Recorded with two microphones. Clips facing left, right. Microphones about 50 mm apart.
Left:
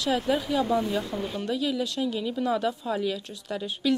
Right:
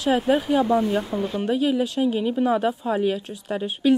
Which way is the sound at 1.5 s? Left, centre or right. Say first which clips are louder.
Right 6 dB; right.